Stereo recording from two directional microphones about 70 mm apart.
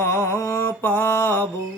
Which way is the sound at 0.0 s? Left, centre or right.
Left.